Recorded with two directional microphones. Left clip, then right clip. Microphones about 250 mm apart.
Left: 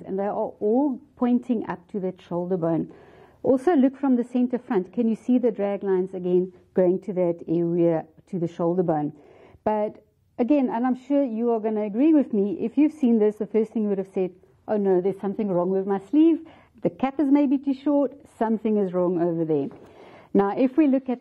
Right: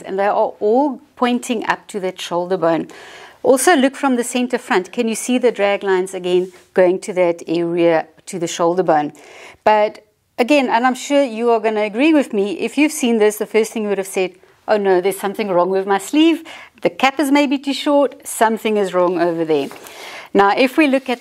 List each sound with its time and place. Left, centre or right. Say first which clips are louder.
0.0 s speech: right 10 dB; centre
0.4 s speech: right 6 dB; right
1.2 s speech: right 8 dB; centre